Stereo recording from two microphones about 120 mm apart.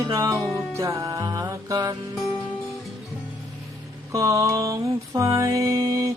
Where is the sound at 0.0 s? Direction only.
30° right (ahead or behind).